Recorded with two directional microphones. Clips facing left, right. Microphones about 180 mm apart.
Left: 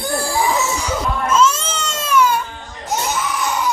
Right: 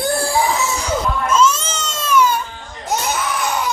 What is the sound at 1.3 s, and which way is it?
Baby cry, 10° left (ahead or behind).